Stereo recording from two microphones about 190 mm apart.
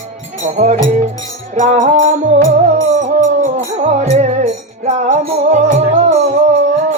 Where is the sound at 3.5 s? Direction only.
35° right (ahead or behind).